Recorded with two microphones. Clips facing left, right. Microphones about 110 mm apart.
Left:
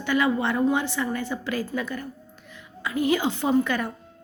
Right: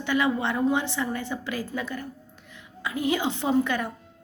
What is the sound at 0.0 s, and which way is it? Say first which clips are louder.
A woman's voice: left 2 dB; 20° right (ahead or behind).